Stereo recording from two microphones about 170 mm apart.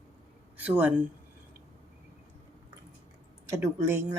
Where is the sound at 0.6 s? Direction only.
10° right (ahead or behind).